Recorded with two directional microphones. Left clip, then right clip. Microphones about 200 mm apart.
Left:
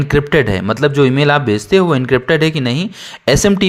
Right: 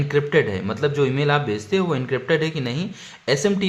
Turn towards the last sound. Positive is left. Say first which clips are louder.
# left 8 dB
turn(degrees=45)  # may be behind; listen again after turning